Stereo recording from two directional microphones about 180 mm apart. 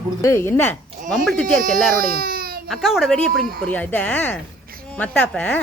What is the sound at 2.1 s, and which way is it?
Baby cry, 55° right (ahead or behind).